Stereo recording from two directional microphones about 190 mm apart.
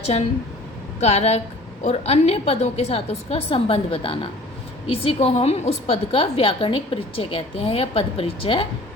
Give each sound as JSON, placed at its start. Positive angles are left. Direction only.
{"t": 0.9, "sound": "a woman's voice", "side_deg": 35}